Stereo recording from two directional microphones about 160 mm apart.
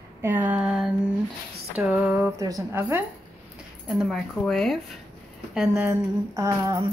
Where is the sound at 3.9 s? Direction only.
Centre (ahead or behind).